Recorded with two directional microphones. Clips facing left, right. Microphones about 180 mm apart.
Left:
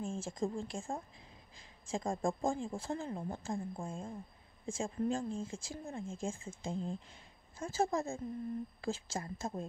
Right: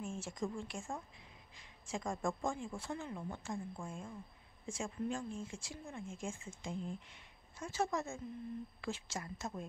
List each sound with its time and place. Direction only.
0.0 s speech: 30° left (ahead or behind)